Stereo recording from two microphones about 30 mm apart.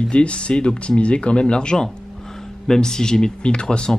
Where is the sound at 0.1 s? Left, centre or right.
Left.